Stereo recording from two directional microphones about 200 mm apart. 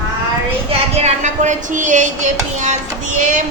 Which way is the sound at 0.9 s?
35° right (ahead or behind).